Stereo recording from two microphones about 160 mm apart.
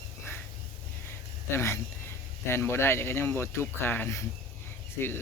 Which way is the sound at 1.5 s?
15° left (ahead or behind).